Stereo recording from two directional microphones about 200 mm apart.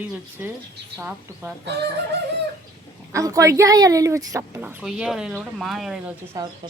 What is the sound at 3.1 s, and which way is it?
Speech, 15° right (ahead or behind).